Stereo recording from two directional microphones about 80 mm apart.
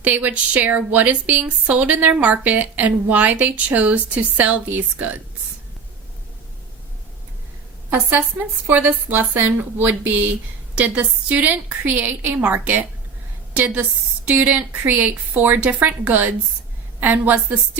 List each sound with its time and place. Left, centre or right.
0.0 s a woman's voice: centre
8.7 s a woman's voice: right